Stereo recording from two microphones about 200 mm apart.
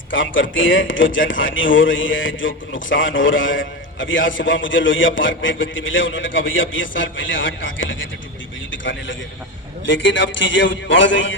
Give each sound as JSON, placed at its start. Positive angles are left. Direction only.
{"t": 0.1, "sound": "a man's voice", "side_deg": 70}